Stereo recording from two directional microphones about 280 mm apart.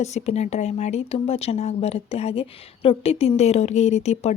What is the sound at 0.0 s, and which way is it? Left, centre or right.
Speech, left.